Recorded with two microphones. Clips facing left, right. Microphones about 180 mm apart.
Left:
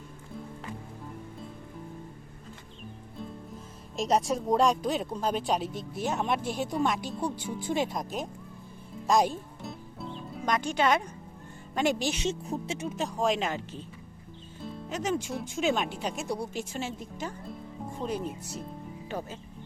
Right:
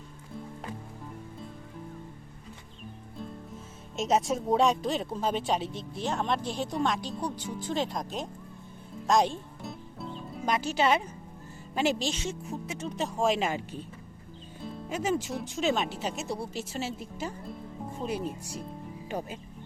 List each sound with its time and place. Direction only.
3.9 s speech: centre (ahead or behind)
9.0 s music: centre (ahead or behind)
11.7 s speech: 5° right (ahead or behind)
12.1 s speech: 20° left (ahead or behind)
12.8 s speech: centre (ahead or behind)
14.6 s speech: centre (ahead or behind)
19.0 s music: 15° right (ahead or behind)